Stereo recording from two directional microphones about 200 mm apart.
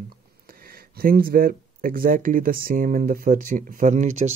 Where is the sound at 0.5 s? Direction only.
45° right (ahead or behind).